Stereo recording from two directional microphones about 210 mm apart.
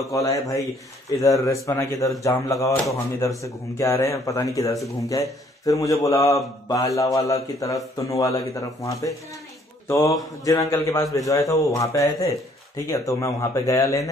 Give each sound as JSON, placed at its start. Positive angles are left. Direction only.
{"t": 0.1, "sound": "speech", "side_deg": 15}
{"t": 9.8, "sound": "mantra", "side_deg": 15}
{"t": 10.7, "sound": "speech", "side_deg": 15}